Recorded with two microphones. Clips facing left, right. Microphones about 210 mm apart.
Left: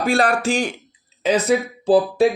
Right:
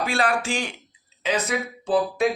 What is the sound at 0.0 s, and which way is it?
Speech, 40° left (ahead or behind).